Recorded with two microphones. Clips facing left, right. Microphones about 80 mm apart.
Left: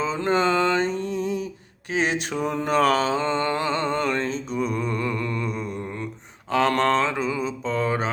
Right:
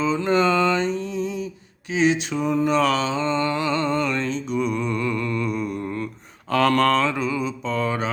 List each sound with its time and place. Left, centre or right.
0.0 s mantra: left
1.9 s a sound: left
2.4 s mantra: left